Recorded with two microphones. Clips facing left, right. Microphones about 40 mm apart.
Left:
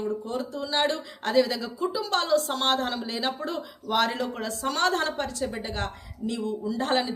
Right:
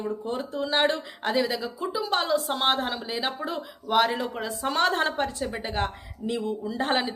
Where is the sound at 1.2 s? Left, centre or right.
Centre.